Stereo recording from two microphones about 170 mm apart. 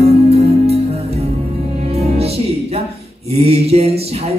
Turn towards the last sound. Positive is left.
turn(degrees=-35)  # may be behind; listen again after turning